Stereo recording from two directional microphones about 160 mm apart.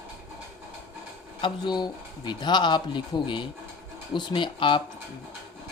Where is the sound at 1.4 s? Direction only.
25° left (ahead or behind).